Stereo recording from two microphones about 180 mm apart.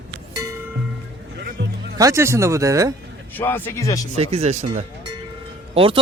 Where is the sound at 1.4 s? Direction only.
65° right (ahead or behind).